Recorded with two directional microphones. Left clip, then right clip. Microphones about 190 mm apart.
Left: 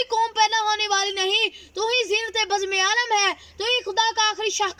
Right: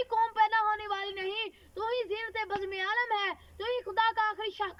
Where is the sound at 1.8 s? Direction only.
15° left (ahead or behind).